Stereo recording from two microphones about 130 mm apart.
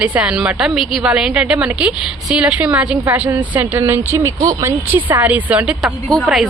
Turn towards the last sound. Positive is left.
turn(degrees=0)  # may be behind; listen again after turning